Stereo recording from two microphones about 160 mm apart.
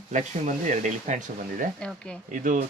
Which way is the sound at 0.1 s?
50° right (ahead or behind).